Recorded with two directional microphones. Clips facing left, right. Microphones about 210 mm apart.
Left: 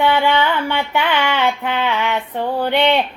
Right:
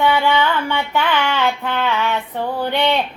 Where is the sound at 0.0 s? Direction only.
15° left (ahead or behind).